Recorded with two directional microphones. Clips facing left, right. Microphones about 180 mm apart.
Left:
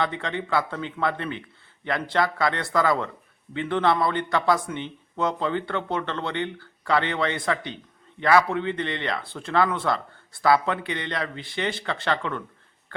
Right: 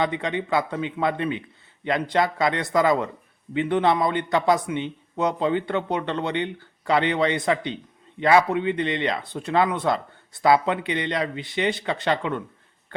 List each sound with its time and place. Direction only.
0.0 s a man's voice: 20° right (ahead or behind)